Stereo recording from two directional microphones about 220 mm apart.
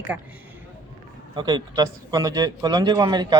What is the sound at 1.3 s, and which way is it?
Speech, 15° right (ahead or behind).